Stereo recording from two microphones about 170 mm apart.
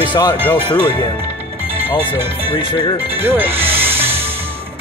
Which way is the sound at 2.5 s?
30° left (ahead or behind).